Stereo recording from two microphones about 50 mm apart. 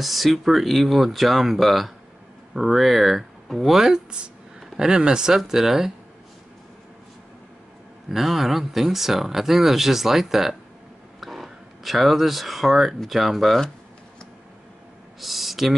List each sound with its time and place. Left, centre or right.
0.0 s speech: centre
8.1 s speech: centre
15.1 s speech: centre